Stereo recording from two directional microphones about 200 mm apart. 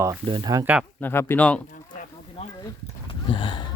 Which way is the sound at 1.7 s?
40° left (ahead or behind).